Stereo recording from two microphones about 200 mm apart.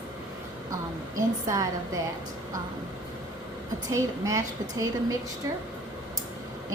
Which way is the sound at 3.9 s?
15° right (ahead or behind).